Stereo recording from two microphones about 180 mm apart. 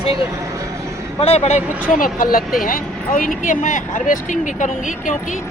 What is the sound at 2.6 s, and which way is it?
Speech, 50° left (ahead or behind).